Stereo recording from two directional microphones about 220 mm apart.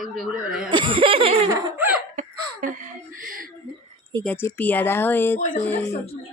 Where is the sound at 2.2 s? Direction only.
35° right (ahead or behind).